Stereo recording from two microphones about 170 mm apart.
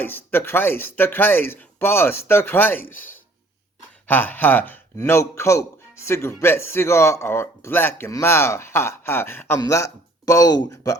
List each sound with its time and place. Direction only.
0.0 s a man's voice: 10° left (ahead or behind)